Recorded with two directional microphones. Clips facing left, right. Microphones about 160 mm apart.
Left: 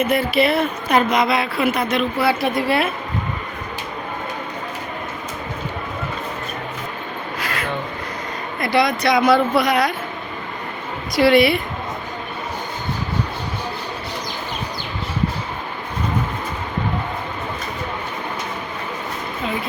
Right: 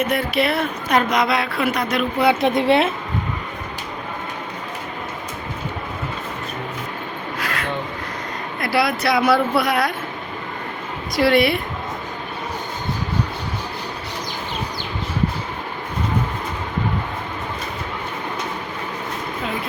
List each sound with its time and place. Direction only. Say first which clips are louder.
0.1 s speech: left 3 dB; centre (ahead or behind)
2.1 s speech: right 2 dB; 20° right (ahead or behind)
7.3 s a sound: even; centre (ahead or behind)
8.6 s speech: left 2 dB; 5° right (ahead or behind)
11.1 s speech: left 2 dB; centre (ahead or behind)